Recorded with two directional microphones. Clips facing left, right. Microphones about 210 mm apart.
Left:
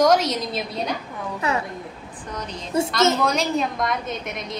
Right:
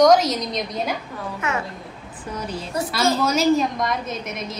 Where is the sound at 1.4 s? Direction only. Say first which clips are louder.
Left 2 dB; 35° left (ahead or behind).